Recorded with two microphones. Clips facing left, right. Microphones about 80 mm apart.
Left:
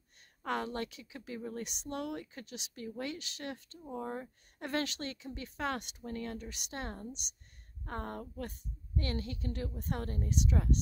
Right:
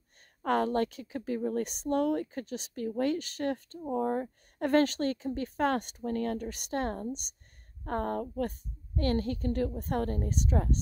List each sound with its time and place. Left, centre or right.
0.4 s speech: right